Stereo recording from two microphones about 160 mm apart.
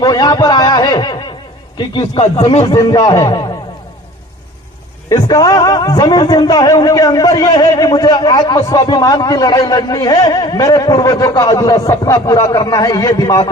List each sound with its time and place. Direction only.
0.0 s a man's voice: 25° left (ahead or behind)
2.6 s a man's voice: 20° left (ahead or behind)
5.0 s a man's voice: 25° left (ahead or behind)